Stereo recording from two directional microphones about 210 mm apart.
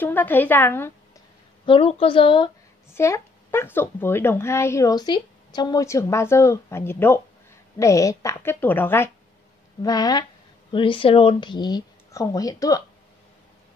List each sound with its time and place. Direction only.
0.0 s speech: 10° left (ahead or behind)
1.7 s speech: 25° left (ahead or behind)
2.9 s speech: 15° left (ahead or behind)